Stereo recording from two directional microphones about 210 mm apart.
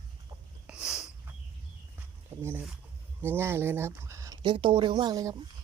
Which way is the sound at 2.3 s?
10° right (ahead or behind).